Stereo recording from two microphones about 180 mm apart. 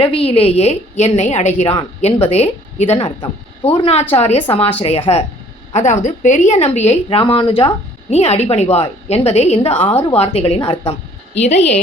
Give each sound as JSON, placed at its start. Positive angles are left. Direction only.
{"t": 0.0, "sound": "a woman's voice", "side_deg": 30}